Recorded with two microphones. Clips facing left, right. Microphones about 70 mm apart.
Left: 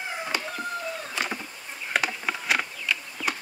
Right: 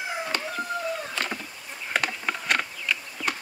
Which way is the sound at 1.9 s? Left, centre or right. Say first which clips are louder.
Even; centre.